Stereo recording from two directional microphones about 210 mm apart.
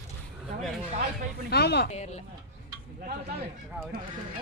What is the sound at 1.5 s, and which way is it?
Speech, 50° left (ahead or behind).